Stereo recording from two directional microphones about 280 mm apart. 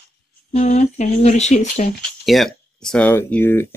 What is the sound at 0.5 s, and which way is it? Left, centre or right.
Speech, left.